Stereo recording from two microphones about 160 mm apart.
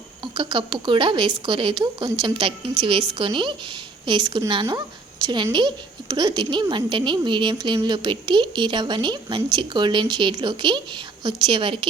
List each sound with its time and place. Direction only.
0.3 s a woman's voice: 30° right (ahead or behind)